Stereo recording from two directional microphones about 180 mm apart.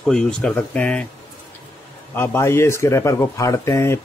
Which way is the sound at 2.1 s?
15° left (ahead or behind).